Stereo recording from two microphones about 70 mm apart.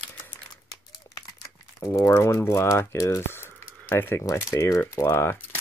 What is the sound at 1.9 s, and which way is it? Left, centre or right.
Speech, left.